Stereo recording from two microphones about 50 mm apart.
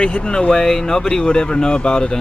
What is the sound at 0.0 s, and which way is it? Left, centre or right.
Speech, centre.